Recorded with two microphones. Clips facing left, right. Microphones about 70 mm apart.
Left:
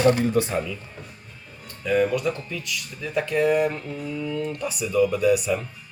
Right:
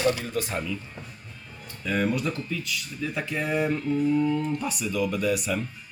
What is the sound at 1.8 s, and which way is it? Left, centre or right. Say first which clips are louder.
Speech: left 5 dB; centre.